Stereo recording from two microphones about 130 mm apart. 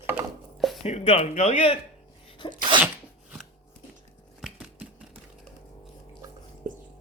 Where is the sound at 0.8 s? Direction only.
55° left (ahead or behind).